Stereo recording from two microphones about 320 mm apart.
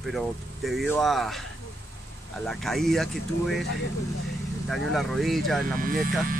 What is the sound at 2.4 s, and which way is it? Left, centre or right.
Speech, centre.